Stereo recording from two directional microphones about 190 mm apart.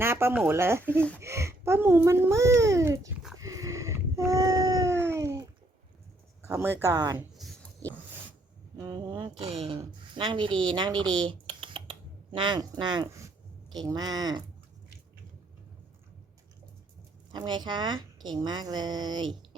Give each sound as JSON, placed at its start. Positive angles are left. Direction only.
{"t": 0.0, "sound": "a child's voice", "side_deg": -15}
{"t": 3.4, "sound": "a sound", "side_deg": -15}
{"t": 6.4, "sound": "a child's voice", "side_deg": -15}
{"t": 8.8, "sound": "a woman's voice", "side_deg": -20}
{"t": 11.0, "sound": "speech", "side_deg": 5}
{"t": 11.3, "sound": "typing", "side_deg": -30}
{"t": 13.7, "sound": "a woman's voice", "side_deg": -20}
{"t": 17.3, "sound": "a woman's voice", "side_deg": -25}